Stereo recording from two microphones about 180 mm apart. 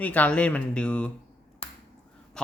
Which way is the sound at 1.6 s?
30° left (ahead or behind).